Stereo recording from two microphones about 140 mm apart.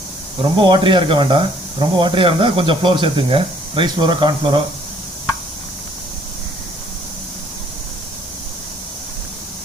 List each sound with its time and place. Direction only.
0.5 s speech: 35° right (ahead or behind)